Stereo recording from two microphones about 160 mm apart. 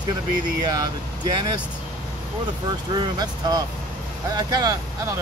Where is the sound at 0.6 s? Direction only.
25° right (ahead or behind).